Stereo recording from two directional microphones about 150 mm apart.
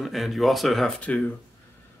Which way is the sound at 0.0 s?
Centre (ahead or behind).